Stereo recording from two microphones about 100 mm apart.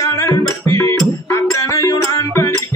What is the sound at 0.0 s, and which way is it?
Music, 35° left (ahead or behind).